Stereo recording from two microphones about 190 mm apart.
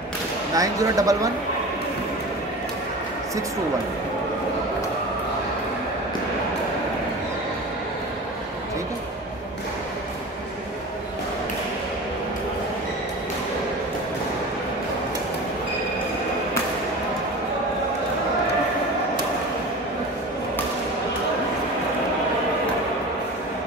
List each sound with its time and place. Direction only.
0.6 s speech: 20° right (ahead or behind)